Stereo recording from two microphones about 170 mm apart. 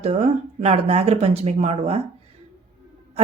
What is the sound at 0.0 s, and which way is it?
Speech, 35° right (ahead or behind).